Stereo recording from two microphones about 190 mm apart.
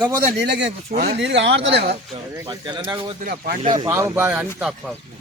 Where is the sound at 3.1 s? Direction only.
45° right (ahead or behind).